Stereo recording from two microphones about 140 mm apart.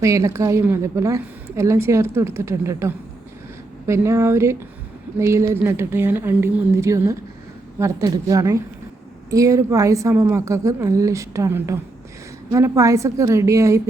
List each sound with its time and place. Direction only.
0.0 s a woman's voice: 20° right (ahead or behind)